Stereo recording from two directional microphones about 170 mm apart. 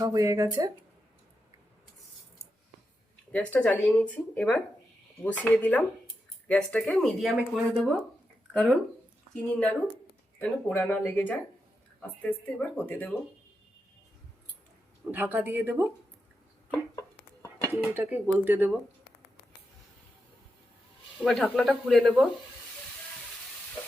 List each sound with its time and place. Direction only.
0.0 s speech: 20° right (ahead or behind)
3.3 s speech: 5° left (ahead or behind)
9.3 s speech: 5° left (ahead or behind)
15.1 s speech: 10° right (ahead or behind)
17.9 s speech: 10° right (ahead or behind)
21.2 s speech: centre (ahead or behind)